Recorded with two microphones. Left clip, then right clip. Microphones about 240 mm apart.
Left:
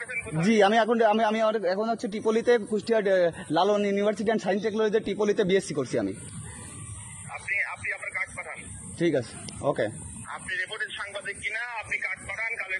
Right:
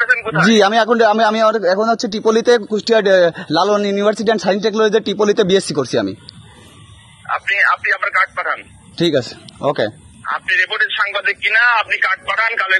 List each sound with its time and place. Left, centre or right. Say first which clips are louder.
0.0 s a sound: right 18 dB; right
0.5 s speech: right 8 dB; right
7.2 s a man's voice: right 15 dB; right